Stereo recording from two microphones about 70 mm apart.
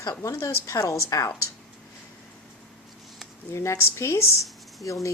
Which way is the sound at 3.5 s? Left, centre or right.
Left.